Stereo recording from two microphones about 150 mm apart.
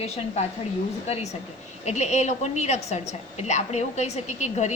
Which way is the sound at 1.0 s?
45° left (ahead or behind).